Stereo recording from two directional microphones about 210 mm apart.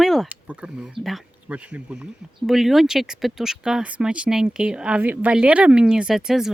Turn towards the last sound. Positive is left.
turn(degrees=0)  # may be behind; listen again after turning